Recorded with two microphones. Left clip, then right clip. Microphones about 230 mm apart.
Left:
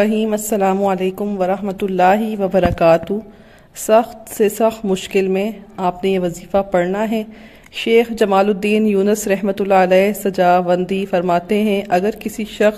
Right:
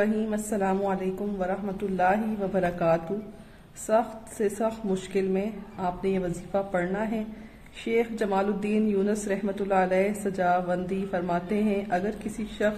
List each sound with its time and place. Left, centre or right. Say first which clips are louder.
0.0 s a woman's voice: left 10 dB; left